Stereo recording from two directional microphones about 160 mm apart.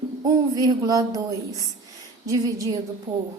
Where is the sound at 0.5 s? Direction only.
20° right (ahead or behind).